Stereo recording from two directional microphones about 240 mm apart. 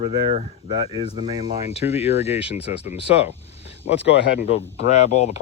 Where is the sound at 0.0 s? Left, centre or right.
Right.